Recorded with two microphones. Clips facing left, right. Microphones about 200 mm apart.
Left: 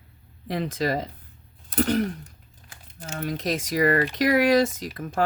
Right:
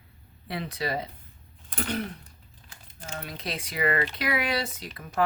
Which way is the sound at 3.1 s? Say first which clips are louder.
Left 8 dB; 45° left (ahead or behind).